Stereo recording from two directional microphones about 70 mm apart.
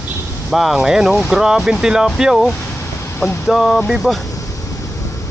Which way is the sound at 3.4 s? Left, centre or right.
Centre.